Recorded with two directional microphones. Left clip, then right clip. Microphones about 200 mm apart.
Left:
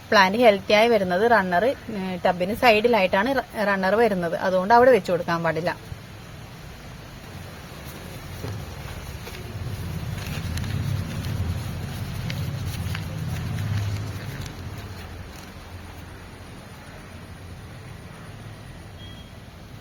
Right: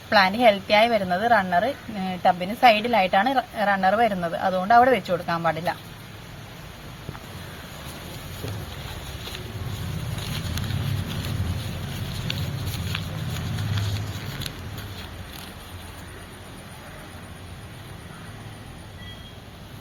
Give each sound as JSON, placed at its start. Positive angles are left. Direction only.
{"t": 0.1, "sound": "a woman's voice", "side_deg": 60}